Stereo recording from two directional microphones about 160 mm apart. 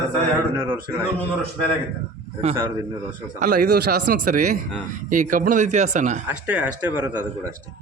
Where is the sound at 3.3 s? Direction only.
55° right (ahead or behind).